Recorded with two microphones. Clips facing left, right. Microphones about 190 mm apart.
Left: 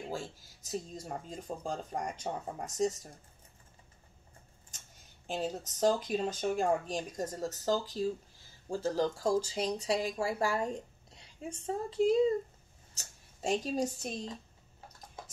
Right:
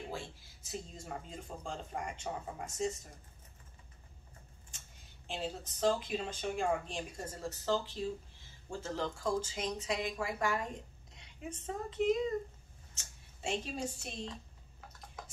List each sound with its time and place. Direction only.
0.1 s speech: 40° left (ahead or behind)
5.2 s speech: 45° left (ahead or behind)
15.2 s a sound: 30° left (ahead or behind)